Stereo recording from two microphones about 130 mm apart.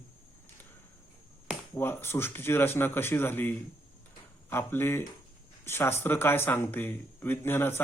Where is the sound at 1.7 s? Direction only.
15° left (ahead or behind).